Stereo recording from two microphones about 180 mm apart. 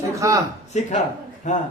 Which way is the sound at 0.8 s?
40° left (ahead or behind).